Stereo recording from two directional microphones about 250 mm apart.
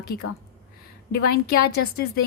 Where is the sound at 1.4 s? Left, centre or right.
Left.